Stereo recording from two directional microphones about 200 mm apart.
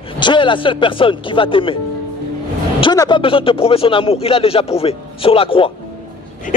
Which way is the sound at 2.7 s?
20° left (ahead or behind).